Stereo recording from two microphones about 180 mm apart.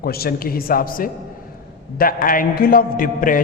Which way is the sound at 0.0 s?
60° left (ahead or behind).